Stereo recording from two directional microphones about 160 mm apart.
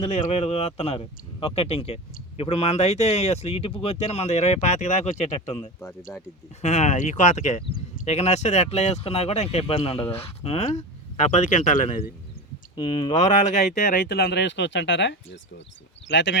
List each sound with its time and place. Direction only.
0.0 s speech: 45° left (ahead or behind)
6.1 s speech: 10° left (ahead or behind)
6.6 s speech: 45° left (ahead or behind)
13.4 s speech: 50° left (ahead or behind)
14.1 s speech: 90° left